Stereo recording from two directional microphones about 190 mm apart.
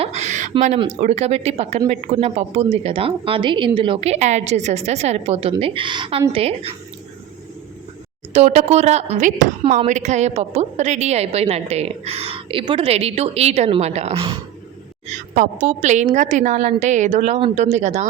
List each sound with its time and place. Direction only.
0.0 s a sound: 35° right (ahead or behind)
0.8 s a woman's voice: 35° right (ahead or behind)
8.3 s a woman's voice: 35° right (ahead or behind)